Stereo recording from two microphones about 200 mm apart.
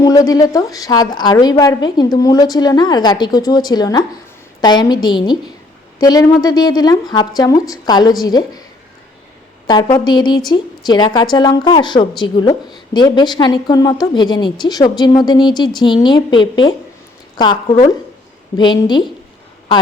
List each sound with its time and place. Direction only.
0.0 s a woman's voice: 15° left (ahead or behind)
9.6 s a woman's voice: 20° left (ahead or behind)